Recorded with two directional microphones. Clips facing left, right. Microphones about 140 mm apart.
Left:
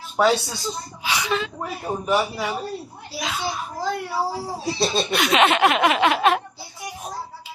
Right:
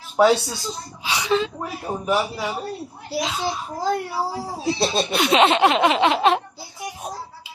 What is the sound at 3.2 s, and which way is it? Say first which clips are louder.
Speech: right 3 dB; 25° right (ahead or behind).